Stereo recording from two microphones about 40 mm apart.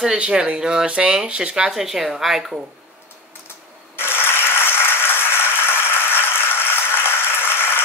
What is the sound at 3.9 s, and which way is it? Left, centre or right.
Ratchet, left.